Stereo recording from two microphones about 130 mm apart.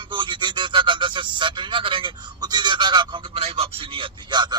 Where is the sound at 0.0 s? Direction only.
40° right (ahead or behind).